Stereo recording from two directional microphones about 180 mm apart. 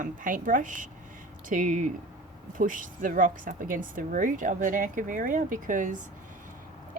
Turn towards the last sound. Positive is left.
turn(degrees=-45)  # may be behind; listen again after turning